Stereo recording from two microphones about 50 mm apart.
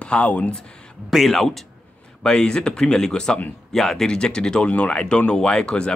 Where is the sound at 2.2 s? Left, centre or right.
Centre.